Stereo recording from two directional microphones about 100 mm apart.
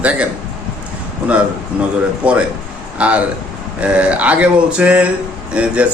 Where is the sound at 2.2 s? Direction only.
10° right (ahead or behind).